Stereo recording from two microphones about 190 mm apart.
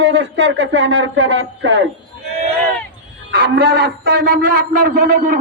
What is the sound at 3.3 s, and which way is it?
A man's voice, 55° right (ahead or behind).